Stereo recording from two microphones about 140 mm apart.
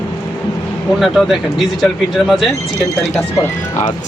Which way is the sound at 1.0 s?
Centre (ahead or behind).